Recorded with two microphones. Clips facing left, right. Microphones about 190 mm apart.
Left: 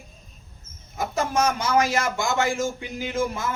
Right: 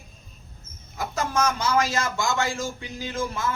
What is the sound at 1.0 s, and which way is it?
A man's voice, 20° left (ahead or behind).